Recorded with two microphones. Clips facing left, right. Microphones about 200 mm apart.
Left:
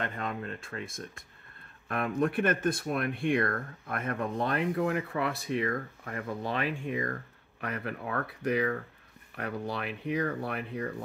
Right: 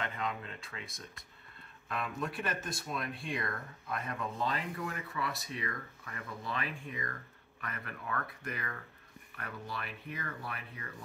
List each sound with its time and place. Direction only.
0.0 s speech: 50° left (ahead or behind)
6.4 s speech: 65° left (ahead or behind)